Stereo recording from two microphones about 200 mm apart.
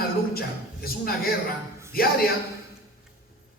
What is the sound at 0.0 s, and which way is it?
Speech, 50° left (ahead or behind).